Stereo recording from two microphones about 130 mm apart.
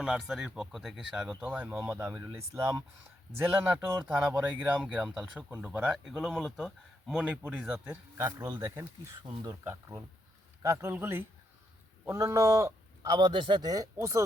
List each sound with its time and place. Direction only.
0.0 s a man's voice: 5° right (ahead or behind)
8.4 s a man's voice: 25° right (ahead or behind)
10.6 s a man's voice: 25° right (ahead or behind)